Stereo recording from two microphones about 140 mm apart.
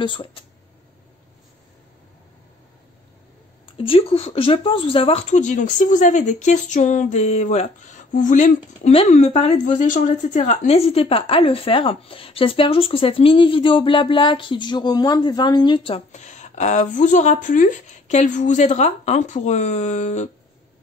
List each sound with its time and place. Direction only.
0.0 s a woman's voice: 40° left (ahead or behind)
3.7 s a woman's voice: 40° left (ahead or behind)
16.1 s speech: 55° left (ahead or behind)